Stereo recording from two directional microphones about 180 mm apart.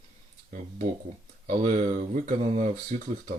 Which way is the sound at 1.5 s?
45° right (ahead or behind).